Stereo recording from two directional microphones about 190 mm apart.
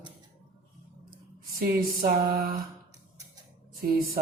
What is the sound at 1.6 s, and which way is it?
Speech, 45° right (ahead or behind).